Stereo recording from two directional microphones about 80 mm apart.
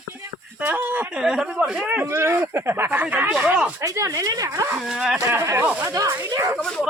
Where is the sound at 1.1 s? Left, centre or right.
Centre.